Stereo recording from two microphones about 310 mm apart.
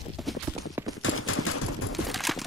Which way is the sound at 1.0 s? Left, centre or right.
Left.